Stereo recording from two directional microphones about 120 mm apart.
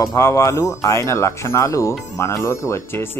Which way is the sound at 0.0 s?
30° left (ahead or behind).